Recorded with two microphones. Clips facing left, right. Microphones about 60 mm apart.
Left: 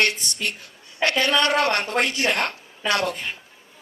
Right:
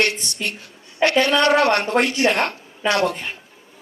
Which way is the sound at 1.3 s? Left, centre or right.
Right.